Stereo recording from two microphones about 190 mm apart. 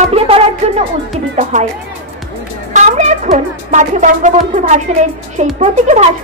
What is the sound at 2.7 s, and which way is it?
Music, 40° right (ahead or behind).